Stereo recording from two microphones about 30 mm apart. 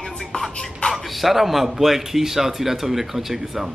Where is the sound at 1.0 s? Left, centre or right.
Centre.